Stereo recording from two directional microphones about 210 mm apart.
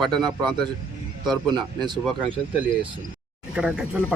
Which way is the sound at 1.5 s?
20° right (ahead or behind).